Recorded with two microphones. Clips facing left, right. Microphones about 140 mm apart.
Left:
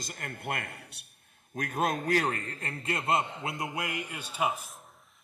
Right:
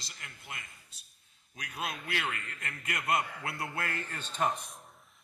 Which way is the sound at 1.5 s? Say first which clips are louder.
Left 9 dB; 50° left (ahead or behind).